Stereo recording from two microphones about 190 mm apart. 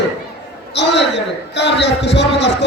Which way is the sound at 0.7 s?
65° left (ahead or behind).